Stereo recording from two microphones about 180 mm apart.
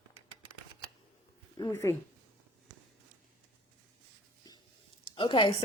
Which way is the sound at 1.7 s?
15° left (ahead or behind).